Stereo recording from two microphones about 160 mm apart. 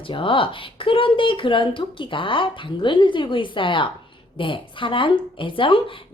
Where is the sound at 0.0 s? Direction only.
35° left (ahead or behind).